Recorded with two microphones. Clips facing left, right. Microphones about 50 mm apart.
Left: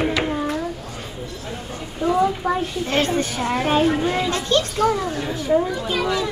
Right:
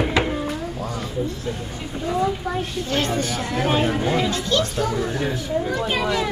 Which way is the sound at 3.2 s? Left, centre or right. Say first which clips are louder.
Left 2 dB; left.